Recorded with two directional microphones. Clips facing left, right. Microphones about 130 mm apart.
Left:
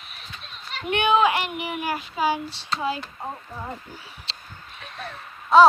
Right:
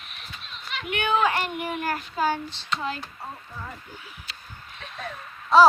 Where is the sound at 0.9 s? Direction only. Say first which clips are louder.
Left 5 dB; 25° left (ahead or behind).